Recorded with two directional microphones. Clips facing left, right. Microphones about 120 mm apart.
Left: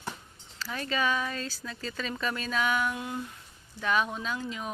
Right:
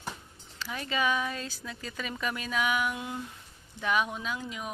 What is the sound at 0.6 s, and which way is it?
Speech, 15° right (ahead or behind).